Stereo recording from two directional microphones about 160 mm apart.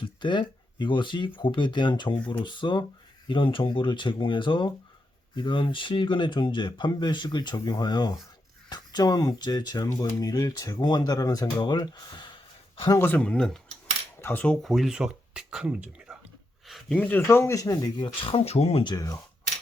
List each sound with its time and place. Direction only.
0.0 s speech: 30° left (ahead or behind)
13.0 s speech: 10° left (ahead or behind)
18.2 s speech: 35° left (ahead or behind)
18.9 s speech: 20° left (ahead or behind)